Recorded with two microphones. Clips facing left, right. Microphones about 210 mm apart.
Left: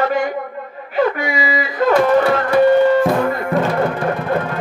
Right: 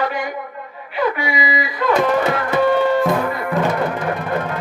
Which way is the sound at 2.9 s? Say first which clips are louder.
Left 3 dB; 45° left (ahead or behind).